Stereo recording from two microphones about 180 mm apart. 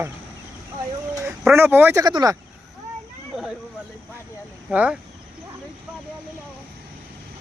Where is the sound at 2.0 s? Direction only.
20° right (ahead or behind).